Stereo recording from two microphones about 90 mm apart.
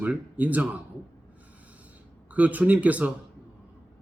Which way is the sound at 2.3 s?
15° right (ahead or behind).